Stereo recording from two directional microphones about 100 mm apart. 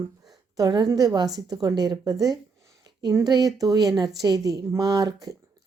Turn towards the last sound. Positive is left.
turn(degrees=-35)  # may be behind; listen again after turning